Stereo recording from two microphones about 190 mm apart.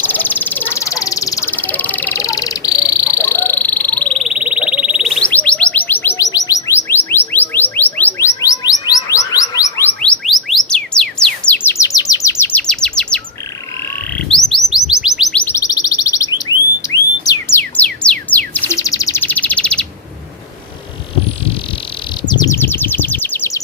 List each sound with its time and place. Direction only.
0.0 s a sound: 10° left (ahead or behind)
8.4 s music: 20° left (ahead or behind)
14.2 s chirp: centre (ahead or behind)
15.0 s bird: centre (ahead or behind)
15.4 s alarm: 15° left (ahead or behind)
22.3 s bird: 20° left (ahead or behind)
22.6 s bird: 10° left (ahead or behind)